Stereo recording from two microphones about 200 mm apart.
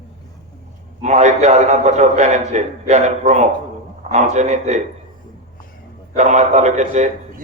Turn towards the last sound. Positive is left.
turn(degrees=-35)  # may be behind; listen again after turning